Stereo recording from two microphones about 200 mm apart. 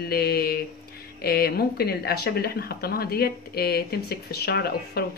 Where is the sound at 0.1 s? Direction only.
50° left (ahead or behind).